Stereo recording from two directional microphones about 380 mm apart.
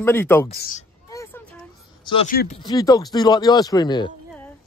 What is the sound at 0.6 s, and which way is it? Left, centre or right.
Speech, left.